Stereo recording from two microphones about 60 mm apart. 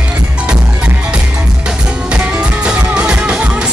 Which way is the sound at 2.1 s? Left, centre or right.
Right.